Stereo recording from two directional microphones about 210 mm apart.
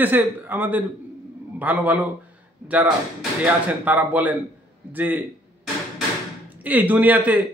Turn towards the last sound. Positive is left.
turn(degrees=-5)  # may be behind; listen again after turning